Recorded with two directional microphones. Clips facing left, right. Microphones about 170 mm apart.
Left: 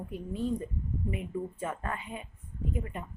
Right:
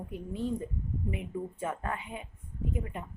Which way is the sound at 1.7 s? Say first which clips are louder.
Right 1 dB; 10° right (ahead or behind).